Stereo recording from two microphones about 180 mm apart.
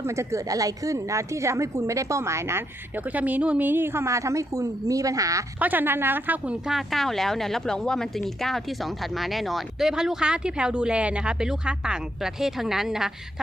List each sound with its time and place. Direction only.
0.2 s a woman's voice: 15° right (ahead or behind)